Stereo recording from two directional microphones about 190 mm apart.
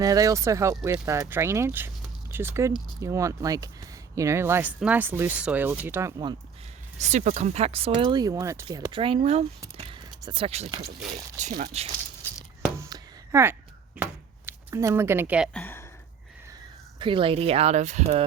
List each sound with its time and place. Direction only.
0.0 s speech: 20° right (ahead or behind)
7.0 s speech: 40° right (ahead or behind)
9.7 s a sound: 30° right (ahead or behind)
11.3 s speech: 40° right (ahead or behind)
12.9 s a sound: 15° right (ahead or behind)
15.5 s speech: 10° left (ahead or behind)
17.0 s speech: 25° right (ahead or behind)